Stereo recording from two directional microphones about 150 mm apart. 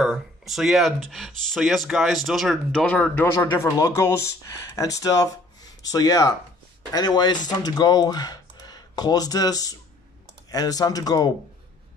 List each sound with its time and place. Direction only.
0.0 s speech: centre (ahead or behind); by 11.3 s 25° left (ahead or behind)